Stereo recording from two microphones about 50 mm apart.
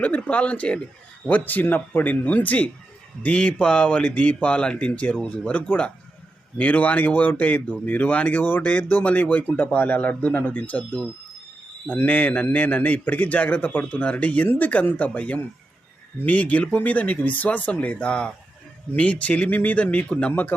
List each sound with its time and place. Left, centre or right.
0.2 s a man's voice: left
3.2 s a man's voice: left